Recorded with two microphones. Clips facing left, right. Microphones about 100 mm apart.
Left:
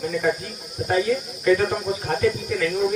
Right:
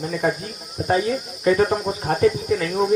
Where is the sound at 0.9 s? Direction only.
35° right (ahead or behind).